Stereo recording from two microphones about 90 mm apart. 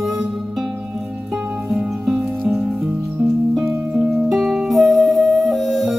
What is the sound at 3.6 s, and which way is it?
Music, 5° right (ahead or behind).